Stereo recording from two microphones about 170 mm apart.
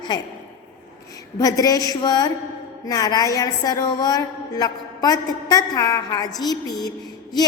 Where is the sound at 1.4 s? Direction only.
20° left (ahead or behind).